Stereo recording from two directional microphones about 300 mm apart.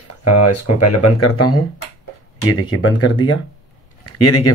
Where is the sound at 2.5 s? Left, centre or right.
Left.